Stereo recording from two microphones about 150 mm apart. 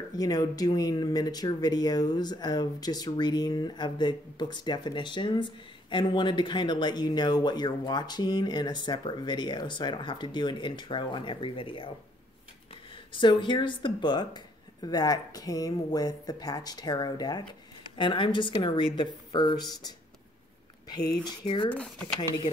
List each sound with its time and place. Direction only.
0.2 s speech: 25° left (ahead or behind)
13.1 s speech: 30° left (ahead or behind)
21.2 s speech: 30° left (ahead or behind)
21.6 s speech: 5° left (ahead or behind)